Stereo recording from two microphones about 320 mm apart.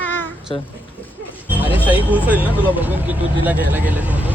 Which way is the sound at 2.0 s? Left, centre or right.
Centre.